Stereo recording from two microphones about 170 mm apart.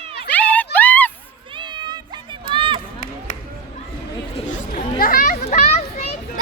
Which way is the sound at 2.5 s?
30° right (ahead or behind).